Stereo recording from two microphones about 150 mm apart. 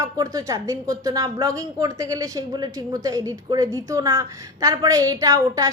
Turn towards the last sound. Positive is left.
turn(degrees=-20)  # may be behind; listen again after turning